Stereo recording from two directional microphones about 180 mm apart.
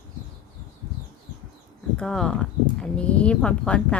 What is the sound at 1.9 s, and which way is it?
Speech, 5° left (ahead or behind).